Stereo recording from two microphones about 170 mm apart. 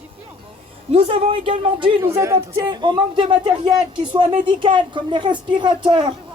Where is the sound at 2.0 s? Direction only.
15° right (ahead or behind).